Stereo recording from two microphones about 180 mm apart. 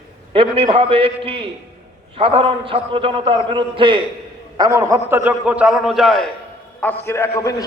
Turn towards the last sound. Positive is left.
turn(degrees=15)  # may be behind; listen again after turning